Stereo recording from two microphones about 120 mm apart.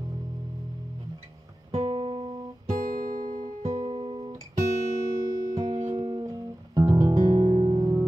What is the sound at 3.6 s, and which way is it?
Music, 55° right (ahead or behind).